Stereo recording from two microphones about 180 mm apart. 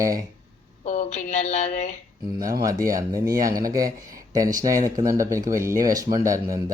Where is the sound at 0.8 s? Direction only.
40° left (ahead or behind).